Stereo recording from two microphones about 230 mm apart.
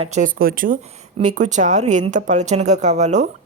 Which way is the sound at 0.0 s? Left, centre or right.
Right.